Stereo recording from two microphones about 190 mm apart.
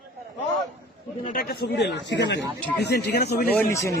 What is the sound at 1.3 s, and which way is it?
A man's voice, 55° left (ahead or behind).